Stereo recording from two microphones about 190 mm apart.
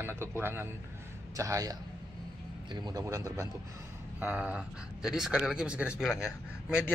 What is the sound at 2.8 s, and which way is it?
Speech, 15° right (ahead or behind).